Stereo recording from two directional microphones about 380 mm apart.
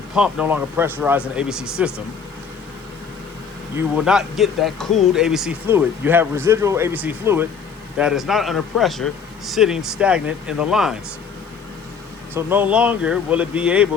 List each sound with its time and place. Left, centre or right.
0.1 s speech: centre
3.8 s speech: centre
12.3 s speech: centre